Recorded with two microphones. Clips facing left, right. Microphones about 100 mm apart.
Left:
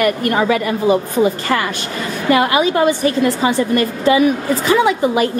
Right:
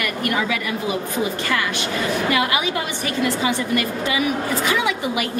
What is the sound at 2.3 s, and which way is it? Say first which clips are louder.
A woman's voice: left 12 dB; 35° left (ahead or behind).